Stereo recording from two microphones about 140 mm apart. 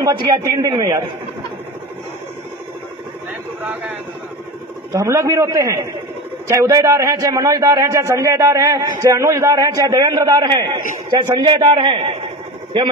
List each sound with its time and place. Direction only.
0.0 s a man's voice: 25° right (ahead or behind)
4.9 s a man's voice: 20° right (ahead or behind)